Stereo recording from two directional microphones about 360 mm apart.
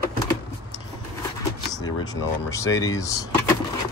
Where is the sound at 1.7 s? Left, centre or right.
Centre.